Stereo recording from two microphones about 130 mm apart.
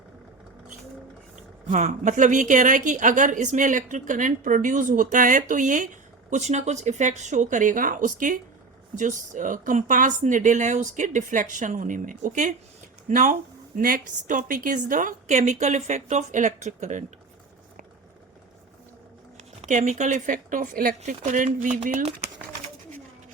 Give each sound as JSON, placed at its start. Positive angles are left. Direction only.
{"t": 1.4, "sound": "a woman's voice", "side_deg": -65}
{"t": 6.3, "sound": "speech", "side_deg": -65}
{"t": 9.0, "sound": "speech", "side_deg": -75}
{"t": 13.7, "sound": "speech", "side_deg": -90}
{"t": 19.6, "sound": "speech", "side_deg": -70}
{"t": 21.8, "sound": "speech", "side_deg": -60}